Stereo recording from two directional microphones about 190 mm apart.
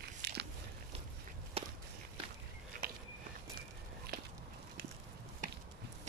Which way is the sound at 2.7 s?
45° right (ahead or behind).